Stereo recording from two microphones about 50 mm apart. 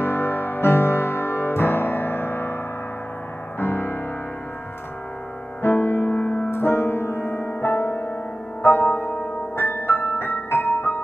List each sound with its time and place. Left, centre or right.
0.0 s music: left
3.5 s music: left
5.6 s music: left